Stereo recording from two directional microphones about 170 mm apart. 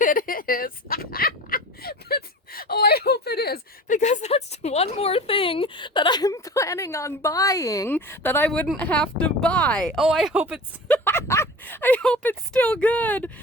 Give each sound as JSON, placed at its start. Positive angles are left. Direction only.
{"t": 0.0, "sound": "fowl", "side_deg": 55}
{"t": 3.9, "sound": "a sound", "side_deg": 45}
{"t": 10.8, "sound": "speech", "side_deg": 10}